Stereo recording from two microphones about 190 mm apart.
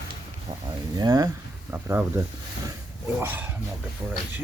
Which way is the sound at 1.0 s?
20° right (ahead or behind).